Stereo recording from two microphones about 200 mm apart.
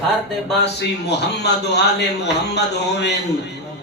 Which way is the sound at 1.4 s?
60° left (ahead or behind).